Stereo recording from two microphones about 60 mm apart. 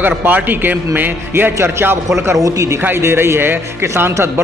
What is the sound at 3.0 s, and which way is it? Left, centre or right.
A man's voice, right.